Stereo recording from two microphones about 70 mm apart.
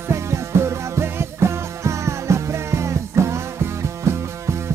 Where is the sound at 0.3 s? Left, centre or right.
Right.